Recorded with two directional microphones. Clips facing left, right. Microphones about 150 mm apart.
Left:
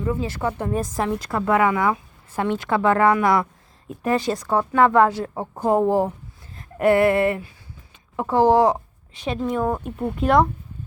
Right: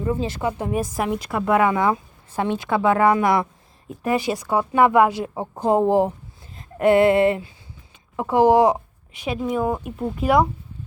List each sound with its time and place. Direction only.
0.1 s a woman's voice: 20° right (ahead or behind); by 10.5 s 5° right (ahead or behind)